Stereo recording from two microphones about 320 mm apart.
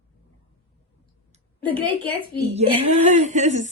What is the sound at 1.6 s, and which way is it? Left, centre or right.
Speech, centre.